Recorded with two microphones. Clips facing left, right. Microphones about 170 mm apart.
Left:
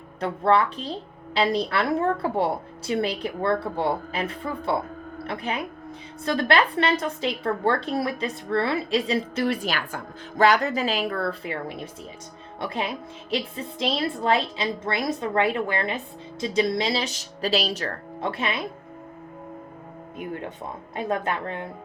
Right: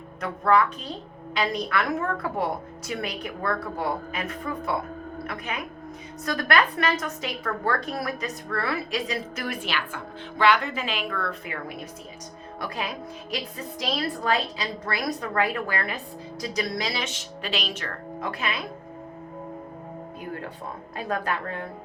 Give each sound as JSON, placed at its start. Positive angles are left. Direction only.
{"t": 0.2, "sound": "a woman's voice", "side_deg": 30}
{"t": 20.1, "sound": "music", "side_deg": 20}
{"t": 20.9, "sound": "a woman's voice", "side_deg": 25}